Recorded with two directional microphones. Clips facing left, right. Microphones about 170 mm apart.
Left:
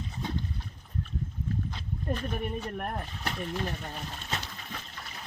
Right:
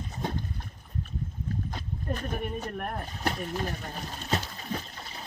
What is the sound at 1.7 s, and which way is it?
Horse, 45° right (ahead or behind).